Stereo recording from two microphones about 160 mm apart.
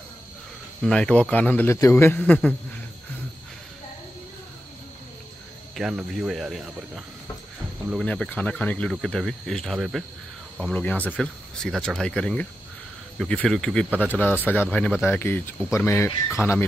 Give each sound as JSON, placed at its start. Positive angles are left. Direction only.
{"t": 0.8, "sound": "a man's voice", "side_deg": 5}
{"t": 5.8, "sound": "speech", "side_deg": 0}
{"t": 7.9, "sound": "a man's voice", "side_deg": 5}
{"t": 10.6, "sound": "a man's voice", "side_deg": 10}